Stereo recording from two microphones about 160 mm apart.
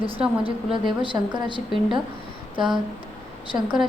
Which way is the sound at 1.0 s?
30° right (ahead or behind).